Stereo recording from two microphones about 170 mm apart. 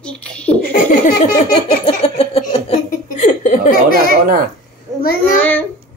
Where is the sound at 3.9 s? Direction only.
60° right (ahead or behind).